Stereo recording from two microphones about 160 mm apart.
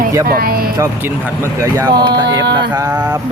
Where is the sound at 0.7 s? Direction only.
15° right (ahead or behind).